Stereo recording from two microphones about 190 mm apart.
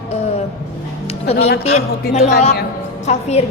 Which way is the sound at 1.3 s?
60° left (ahead or behind).